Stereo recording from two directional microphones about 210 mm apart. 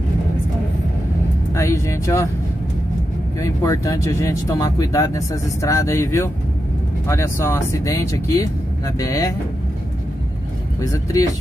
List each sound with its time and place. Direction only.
1.5 s speech: 15° left (ahead or behind)
3.3 s speech: 15° left (ahead or behind)
10.8 s speech: 15° left (ahead or behind)